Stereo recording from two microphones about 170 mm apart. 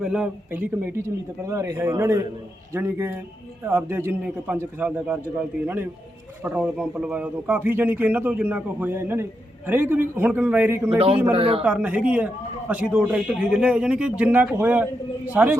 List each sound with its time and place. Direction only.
0.0 s a man's voice: 5° right (ahead or behind)
11.3 s speech: 35° right (ahead or behind)
11.6 s a man's voice: 10° right (ahead or behind)